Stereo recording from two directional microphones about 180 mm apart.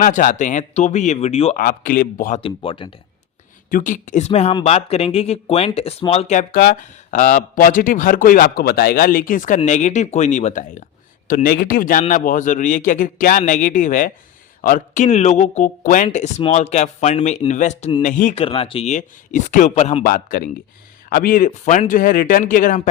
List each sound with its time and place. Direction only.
0.0 s speech: 45° left (ahead or behind)
1.5 s speech: 50° left (ahead or behind)
2.4 s speech: 30° left (ahead or behind)
3.7 s speech: 50° left (ahead or behind)
11.4 s speech: 55° left (ahead or behind)
16.4 s speech: 35° left (ahead or behind)
18.4 s speech: 30° left (ahead or behind)
20.1 s speech: 50° left (ahead or behind)